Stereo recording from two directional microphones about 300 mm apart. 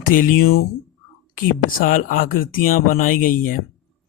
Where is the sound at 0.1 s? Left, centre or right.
Left.